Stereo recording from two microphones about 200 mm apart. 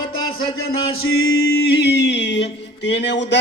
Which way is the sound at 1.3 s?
50° left (ahead or behind).